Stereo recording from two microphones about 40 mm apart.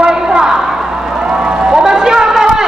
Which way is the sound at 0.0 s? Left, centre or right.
Right.